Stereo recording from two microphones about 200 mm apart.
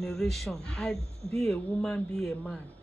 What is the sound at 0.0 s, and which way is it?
A man's voice, centre (ahead or behind).